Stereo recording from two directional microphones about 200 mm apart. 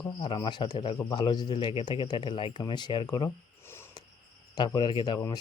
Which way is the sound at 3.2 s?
10° left (ahead or behind).